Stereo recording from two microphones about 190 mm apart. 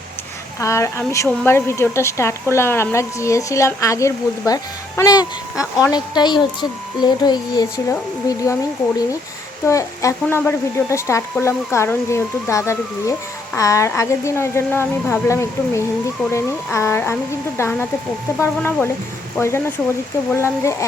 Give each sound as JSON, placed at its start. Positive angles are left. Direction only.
{"t": 0.6, "sound": "speech", "side_deg": 15}
{"t": 9.6, "sound": "speech", "side_deg": 15}